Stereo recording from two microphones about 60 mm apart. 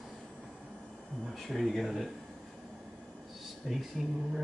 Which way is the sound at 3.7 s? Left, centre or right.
Centre.